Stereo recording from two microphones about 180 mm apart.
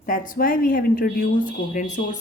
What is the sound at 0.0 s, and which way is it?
A woman's voice, 50° left (ahead or behind).